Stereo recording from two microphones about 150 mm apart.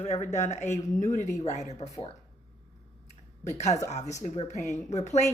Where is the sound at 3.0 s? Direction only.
50° left (ahead or behind).